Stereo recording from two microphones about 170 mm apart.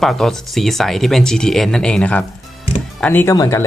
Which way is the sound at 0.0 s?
Centre (ahead or behind).